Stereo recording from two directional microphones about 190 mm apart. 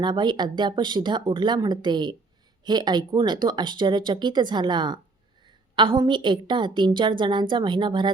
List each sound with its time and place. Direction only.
0.0 s a woman's voice: 25° right (ahead or behind)